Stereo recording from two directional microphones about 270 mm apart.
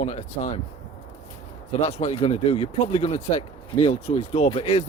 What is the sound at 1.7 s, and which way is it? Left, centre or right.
Speech, left.